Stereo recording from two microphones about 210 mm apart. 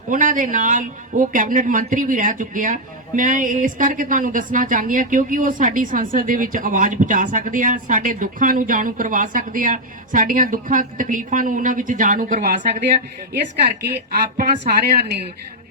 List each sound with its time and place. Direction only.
0.1 s a woman's voice: 40° right (ahead or behind)
13.3 s a woman's voice: 50° right (ahead or behind)